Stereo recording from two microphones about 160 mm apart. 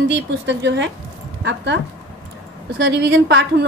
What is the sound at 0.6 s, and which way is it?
Speech, 90° right.